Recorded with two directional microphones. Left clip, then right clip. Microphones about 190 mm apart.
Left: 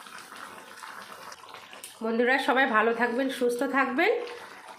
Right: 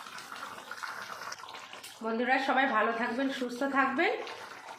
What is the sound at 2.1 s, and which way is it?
A woman's voice, 40° left (ahead or behind).